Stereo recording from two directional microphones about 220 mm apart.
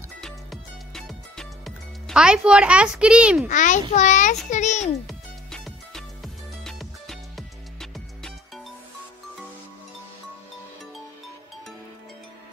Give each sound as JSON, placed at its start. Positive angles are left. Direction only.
{"t": 0.2, "sound": "music", "side_deg": 0}
{"t": 3.4, "sound": "a child's voice", "side_deg": 35}
{"t": 5.0, "sound": "music", "side_deg": 0}